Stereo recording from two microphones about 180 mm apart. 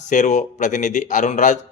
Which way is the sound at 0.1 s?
40° left (ahead or behind).